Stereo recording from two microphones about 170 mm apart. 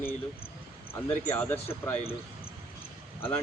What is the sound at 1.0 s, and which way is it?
A man's voice, 10° left (ahead or behind).